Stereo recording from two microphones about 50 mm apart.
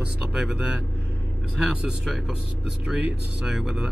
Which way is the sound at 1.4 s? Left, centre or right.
Centre.